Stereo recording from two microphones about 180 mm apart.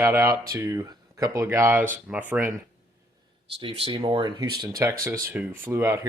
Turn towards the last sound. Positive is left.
turn(degrees=-15)  # may be behind; listen again after turning